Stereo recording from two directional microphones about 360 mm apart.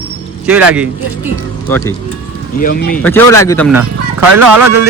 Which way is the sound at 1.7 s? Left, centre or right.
Centre.